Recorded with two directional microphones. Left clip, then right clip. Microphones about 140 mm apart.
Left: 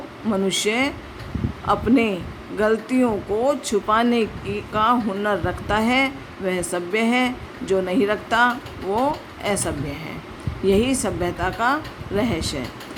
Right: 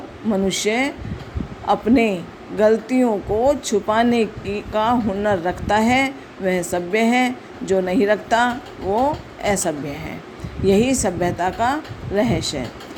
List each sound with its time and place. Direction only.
0.3 s speech: 15° right (ahead or behind)